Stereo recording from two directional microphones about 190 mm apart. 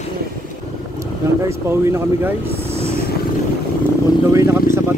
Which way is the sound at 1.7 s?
15° right (ahead or behind).